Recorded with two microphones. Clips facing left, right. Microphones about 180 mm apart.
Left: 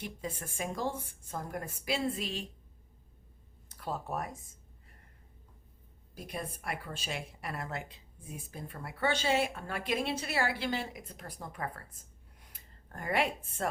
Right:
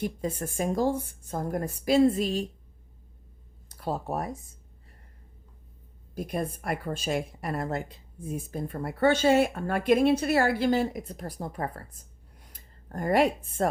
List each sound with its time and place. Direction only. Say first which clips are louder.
0.0 s a woman's voice: right 9 dB; 40° right (ahead or behind)
3.7 s speech: right 6 dB; 35° right (ahead or behind)
6.1 s a woman's voice: right 9 dB; 50° right (ahead or behind)